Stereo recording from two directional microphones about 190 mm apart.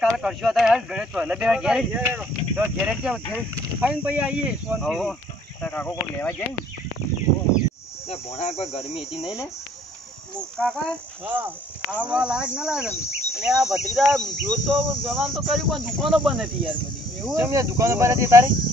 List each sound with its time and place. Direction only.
0.0 s speech: centre (ahead or behind)
8.4 s insect: 35° left (ahead or behind)
8.9 s speech: centre (ahead or behind)
10.6 s speech: 5° left (ahead or behind)
11.2 s speech: 10° right (ahead or behind)
12.8 s speech: 15° left (ahead or behind)
13.3 s speech: 5° right (ahead or behind)
17.3 s speech: 15° right (ahead or behind)